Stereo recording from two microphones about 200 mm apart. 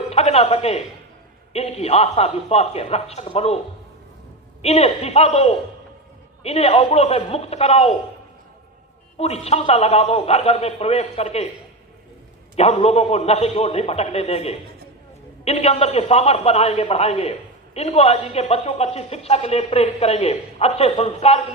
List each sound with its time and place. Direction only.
0.1 s music: 30° left (ahead or behind)
1.5 s speech: 30° left (ahead or behind)
4.6 s speech: 30° left (ahead or behind)
9.1 s speech: 30° left (ahead or behind)
12.5 s speech: 30° left (ahead or behind)